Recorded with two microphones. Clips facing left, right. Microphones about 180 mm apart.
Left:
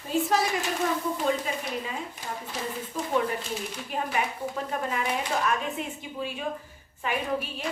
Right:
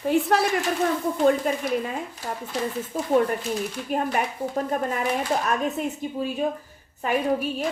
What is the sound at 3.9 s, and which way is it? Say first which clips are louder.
Speech: right 4 dB; 45° right (ahead or behind).